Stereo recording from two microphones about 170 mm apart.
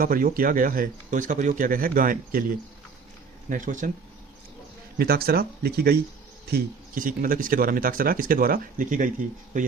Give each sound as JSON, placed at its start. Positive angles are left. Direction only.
{"t": 0.0, "sound": "speech", "side_deg": -55}
{"t": 3.5, "sound": "speech", "side_deg": -50}
{"t": 4.9, "sound": "speech", "side_deg": -65}
{"t": 6.5, "sound": "speech", "side_deg": -55}